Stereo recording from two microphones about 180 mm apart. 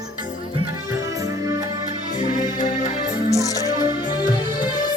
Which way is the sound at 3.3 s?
20° left (ahead or behind).